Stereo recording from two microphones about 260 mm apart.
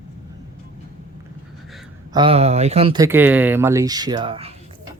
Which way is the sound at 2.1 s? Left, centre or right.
Right.